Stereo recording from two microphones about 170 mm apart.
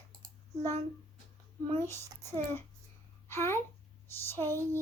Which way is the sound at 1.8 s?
15° left (ahead or behind).